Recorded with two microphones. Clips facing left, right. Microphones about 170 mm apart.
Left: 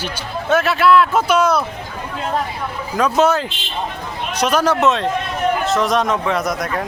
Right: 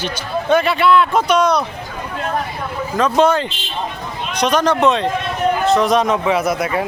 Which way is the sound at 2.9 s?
5° left (ahead or behind).